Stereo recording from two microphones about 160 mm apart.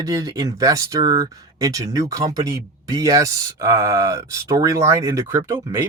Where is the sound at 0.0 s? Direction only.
20° right (ahead or behind).